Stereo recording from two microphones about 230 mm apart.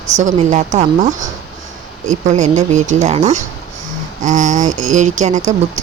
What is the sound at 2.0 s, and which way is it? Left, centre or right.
Speech, right.